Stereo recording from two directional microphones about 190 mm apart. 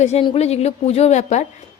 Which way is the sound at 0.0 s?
30° left (ahead or behind).